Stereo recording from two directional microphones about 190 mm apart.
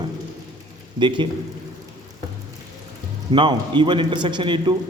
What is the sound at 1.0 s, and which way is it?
Speech, 25° right (ahead or behind).